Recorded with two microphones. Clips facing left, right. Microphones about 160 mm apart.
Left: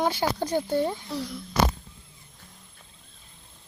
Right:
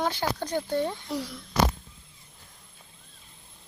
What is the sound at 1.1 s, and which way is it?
Speech, 10° right (ahead or behind).